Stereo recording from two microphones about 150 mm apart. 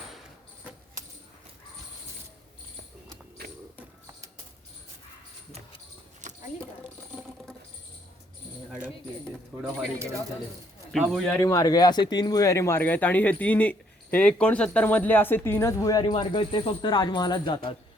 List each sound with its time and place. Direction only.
6.2 s a sound: 55° right (ahead or behind)
9.6 s speech: 5° right (ahead or behind)
10.9 s speech: centre (ahead or behind)
11.3 s speech: 20° left (ahead or behind)